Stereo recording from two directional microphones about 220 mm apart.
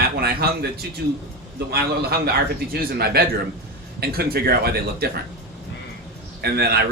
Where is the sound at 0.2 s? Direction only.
45° right (ahead or behind).